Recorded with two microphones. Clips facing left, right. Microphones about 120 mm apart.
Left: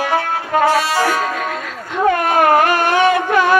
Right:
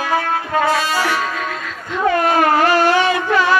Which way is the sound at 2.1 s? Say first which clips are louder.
Left 1 dB; 50° left (ahead or behind).